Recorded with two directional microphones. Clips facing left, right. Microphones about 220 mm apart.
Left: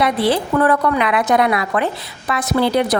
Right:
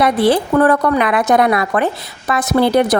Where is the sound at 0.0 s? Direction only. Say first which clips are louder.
Right 4 dB; 45° right (ahead or behind).